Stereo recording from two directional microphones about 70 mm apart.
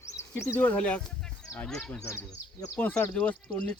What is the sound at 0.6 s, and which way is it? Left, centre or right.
Speech, centre.